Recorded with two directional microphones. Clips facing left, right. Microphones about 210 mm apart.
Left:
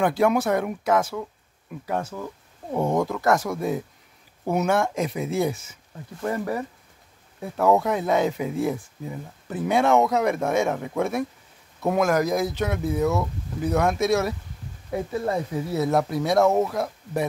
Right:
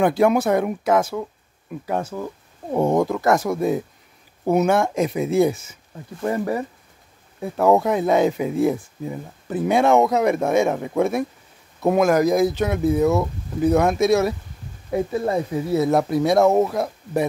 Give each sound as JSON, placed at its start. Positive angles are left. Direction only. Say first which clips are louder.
{"t": 0.0, "sound": "speech", "louder": "right 4 dB", "side_deg": -20}
{"t": 1.9, "sound": "speech", "louder": "right 3 dB", "side_deg": -25}
{"t": 16.4, "sound": "speech", "louder": "right 4 dB", "side_deg": -25}
{"t": 16.7, "sound": "speech", "louder": "right 4 dB", "side_deg": -10}